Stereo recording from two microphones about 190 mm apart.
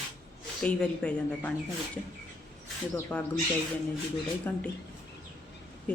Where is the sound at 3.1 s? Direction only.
5° left (ahead or behind).